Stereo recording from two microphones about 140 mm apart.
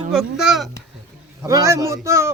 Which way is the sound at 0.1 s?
5° right (ahead or behind).